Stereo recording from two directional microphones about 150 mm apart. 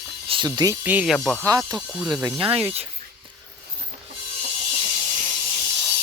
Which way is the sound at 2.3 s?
35° right (ahead or behind).